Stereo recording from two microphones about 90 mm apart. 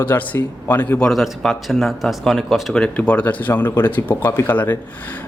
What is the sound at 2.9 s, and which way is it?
A man's voice, 15° left (ahead or behind).